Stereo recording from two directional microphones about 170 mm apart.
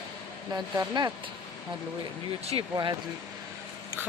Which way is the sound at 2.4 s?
35° right (ahead or behind).